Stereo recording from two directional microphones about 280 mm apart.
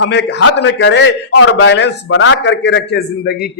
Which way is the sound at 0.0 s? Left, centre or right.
Left.